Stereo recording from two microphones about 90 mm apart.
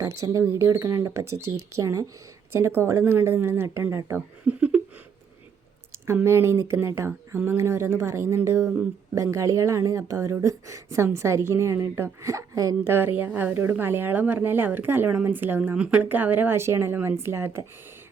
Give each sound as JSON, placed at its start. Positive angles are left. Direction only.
{"t": 0.0, "sound": "a woman's voice", "side_deg": -35}
{"t": 4.4, "sound": "a sound", "side_deg": -15}
{"t": 6.2, "sound": "a woman's voice", "side_deg": -30}
{"t": 12.8, "sound": "a woman's voice", "side_deg": -25}